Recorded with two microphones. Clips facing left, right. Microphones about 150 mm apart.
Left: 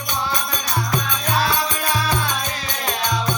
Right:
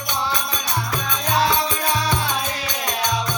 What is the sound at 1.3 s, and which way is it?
Music, 25° right (ahead or behind).